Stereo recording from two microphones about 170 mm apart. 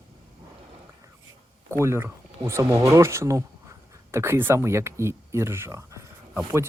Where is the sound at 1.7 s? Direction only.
15° right (ahead or behind).